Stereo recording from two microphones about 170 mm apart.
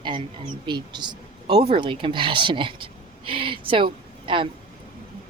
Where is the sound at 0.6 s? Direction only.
25° right (ahead or behind).